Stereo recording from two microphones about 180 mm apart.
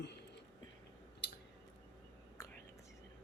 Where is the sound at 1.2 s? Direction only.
75° left (ahead or behind).